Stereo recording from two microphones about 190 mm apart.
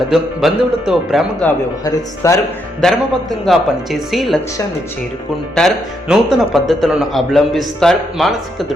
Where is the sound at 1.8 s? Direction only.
15° left (ahead or behind).